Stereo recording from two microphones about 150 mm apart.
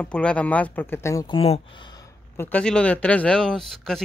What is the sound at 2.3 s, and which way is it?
Speech, 10° left (ahead or behind).